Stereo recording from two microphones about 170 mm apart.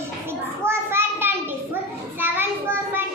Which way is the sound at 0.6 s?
15° right (ahead or behind).